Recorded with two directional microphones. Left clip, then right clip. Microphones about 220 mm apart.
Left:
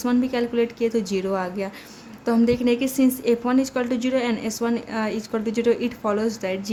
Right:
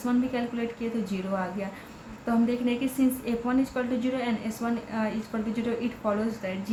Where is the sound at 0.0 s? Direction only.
55° left (ahead or behind).